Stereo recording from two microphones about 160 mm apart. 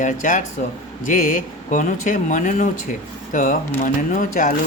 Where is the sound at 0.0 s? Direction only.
50° left (ahead or behind).